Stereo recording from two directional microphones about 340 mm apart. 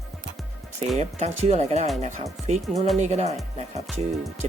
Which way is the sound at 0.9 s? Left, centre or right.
Centre.